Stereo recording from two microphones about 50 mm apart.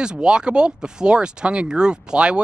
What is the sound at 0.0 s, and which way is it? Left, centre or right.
Speech, centre.